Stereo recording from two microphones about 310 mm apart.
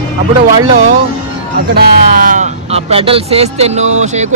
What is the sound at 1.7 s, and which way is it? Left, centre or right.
Speech, right.